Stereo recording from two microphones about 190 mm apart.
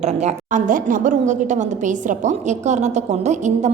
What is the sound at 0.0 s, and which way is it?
A woman's voice, 35° right (ahead or behind).